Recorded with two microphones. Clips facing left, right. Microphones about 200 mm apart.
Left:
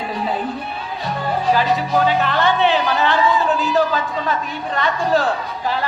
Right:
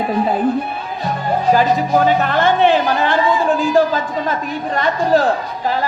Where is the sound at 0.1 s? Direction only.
50° right (ahead or behind).